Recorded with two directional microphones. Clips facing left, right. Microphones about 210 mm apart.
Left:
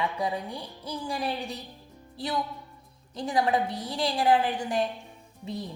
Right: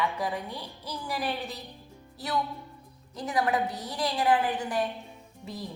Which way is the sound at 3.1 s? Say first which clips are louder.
Left 2 dB; 25° left (ahead or behind).